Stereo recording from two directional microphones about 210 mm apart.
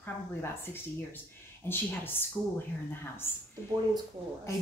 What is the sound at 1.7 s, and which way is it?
Speech, 10° left (ahead or behind).